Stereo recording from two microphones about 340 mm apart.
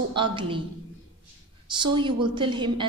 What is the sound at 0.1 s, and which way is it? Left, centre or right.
Speech, centre.